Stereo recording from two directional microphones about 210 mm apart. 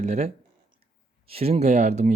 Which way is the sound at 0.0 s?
30° right (ahead or behind).